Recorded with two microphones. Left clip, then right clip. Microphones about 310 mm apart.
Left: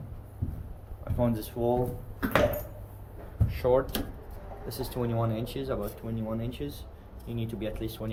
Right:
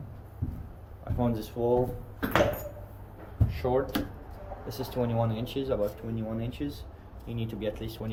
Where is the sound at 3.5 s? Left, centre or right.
Centre.